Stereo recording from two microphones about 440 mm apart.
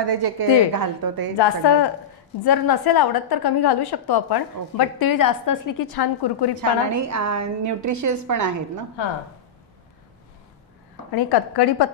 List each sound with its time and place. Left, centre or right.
0.0 s a woman's voice: right
1.4 s a woman's voice: left
6.5 s a woman's voice: right
11.1 s a woman's voice: left